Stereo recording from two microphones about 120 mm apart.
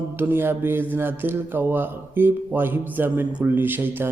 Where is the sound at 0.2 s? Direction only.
15° right (ahead or behind).